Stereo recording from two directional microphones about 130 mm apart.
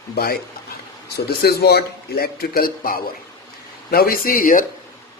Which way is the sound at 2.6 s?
90° left.